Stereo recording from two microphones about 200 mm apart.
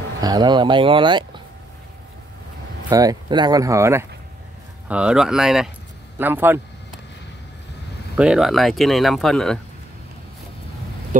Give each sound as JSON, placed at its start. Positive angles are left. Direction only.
{"t": 0.2, "sound": "speech", "side_deg": -20}
{"t": 2.9, "sound": "a man's voice", "side_deg": -20}
{"t": 8.2, "sound": "speech", "side_deg": -5}